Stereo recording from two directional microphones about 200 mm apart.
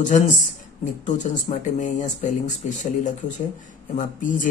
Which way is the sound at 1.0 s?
40° left (ahead or behind).